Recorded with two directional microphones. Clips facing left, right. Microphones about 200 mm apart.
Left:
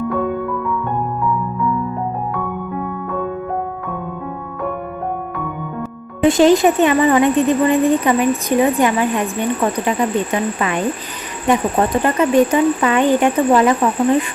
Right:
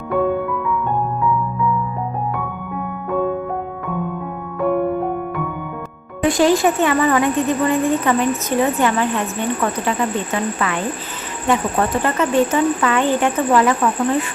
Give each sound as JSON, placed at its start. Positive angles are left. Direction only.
{"t": 6.2, "sound": "speech", "side_deg": 20}